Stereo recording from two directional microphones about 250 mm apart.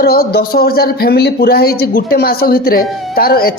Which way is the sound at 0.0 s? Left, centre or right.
Left.